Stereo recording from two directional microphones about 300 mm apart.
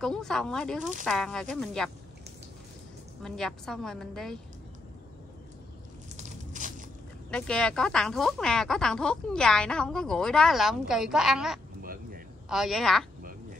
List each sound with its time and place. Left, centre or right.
0.0 s speech: centre
3.2 s speech: centre
6.1 s a sound: right
7.2 s speech: centre
11.8 s a sound: right
12.4 s speech: centre